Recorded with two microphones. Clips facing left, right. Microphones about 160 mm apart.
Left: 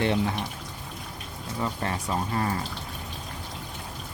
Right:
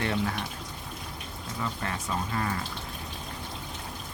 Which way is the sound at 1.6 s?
30° left (ahead or behind).